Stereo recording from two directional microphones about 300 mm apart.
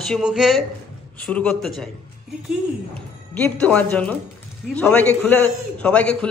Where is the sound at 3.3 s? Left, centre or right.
Centre.